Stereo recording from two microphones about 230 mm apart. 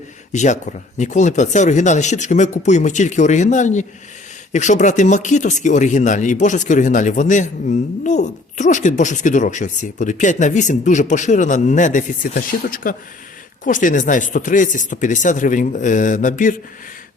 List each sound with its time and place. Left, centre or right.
0.3 s speech: left